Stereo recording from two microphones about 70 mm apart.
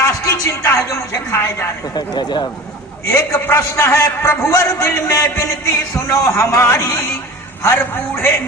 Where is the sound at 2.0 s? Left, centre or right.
Left.